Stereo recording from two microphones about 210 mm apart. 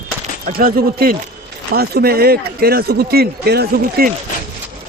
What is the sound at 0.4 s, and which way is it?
A man's voice, 45° right (ahead or behind).